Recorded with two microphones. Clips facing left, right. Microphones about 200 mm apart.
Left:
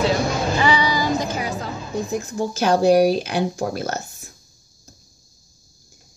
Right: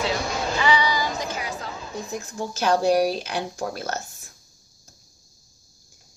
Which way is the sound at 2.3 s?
10° left (ahead or behind).